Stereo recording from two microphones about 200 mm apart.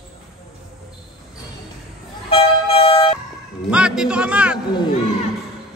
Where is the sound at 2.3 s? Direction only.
30° left (ahead or behind).